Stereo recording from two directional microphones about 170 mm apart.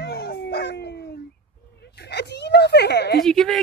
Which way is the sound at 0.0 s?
70° left (ahead or behind).